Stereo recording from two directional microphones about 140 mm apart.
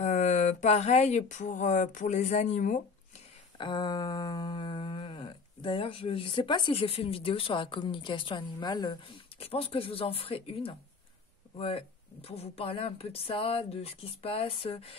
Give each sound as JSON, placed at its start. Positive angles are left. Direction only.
{"t": 0.0, "sound": "speech", "side_deg": 60}
{"t": 3.5, "sound": "a sound", "side_deg": 35}
{"t": 11.5, "sound": "speech", "side_deg": 40}